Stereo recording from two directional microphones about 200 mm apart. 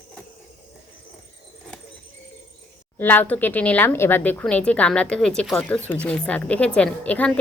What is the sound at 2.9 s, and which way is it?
Speech, 10° left (ahead or behind).